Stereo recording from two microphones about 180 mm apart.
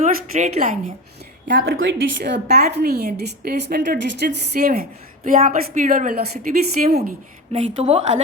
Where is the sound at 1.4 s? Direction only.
80° right; by 7.2 s 55° right (ahead or behind).